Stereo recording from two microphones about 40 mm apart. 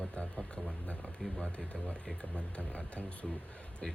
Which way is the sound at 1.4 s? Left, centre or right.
Left.